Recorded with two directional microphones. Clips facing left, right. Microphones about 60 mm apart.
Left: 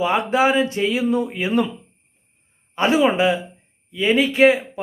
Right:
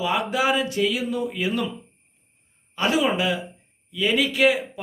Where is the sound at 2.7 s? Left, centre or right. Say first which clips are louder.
Left 5 dB; left.